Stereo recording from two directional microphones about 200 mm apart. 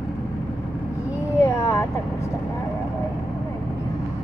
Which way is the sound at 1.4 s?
15° left (ahead or behind).